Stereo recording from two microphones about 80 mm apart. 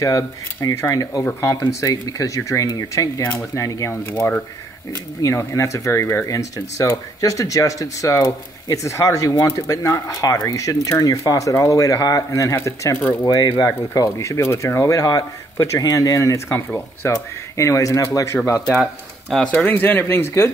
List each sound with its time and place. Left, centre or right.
0.0 s speech: left
5.2 s speech: left
6.2 s speech: left
12.9 s speech: left
13.9 s speech: left
15.0 s speech: left
19.3 s speech: centre; by 20.5 s left